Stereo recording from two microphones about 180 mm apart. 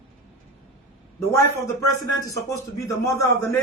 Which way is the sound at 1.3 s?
15° left (ahead or behind).